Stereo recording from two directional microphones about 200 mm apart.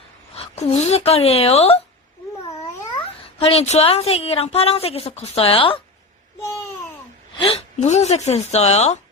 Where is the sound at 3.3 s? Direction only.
30° left (ahead or behind).